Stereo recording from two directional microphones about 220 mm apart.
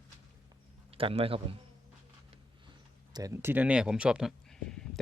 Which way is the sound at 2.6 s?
20° right (ahead or behind).